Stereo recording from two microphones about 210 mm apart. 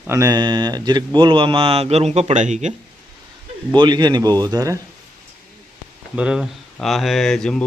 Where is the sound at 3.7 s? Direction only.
20° right (ahead or behind).